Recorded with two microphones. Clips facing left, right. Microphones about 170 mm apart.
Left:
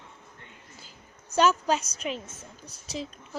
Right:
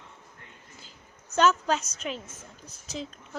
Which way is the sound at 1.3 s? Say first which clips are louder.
Even; 10° left (ahead or behind).